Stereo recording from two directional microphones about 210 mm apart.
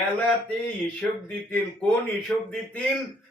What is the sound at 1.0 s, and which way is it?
Speech, 5° left (ahead or behind).